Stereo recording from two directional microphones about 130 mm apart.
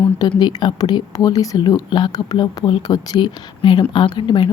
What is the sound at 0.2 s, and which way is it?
Speech, 35° left (ahead or behind).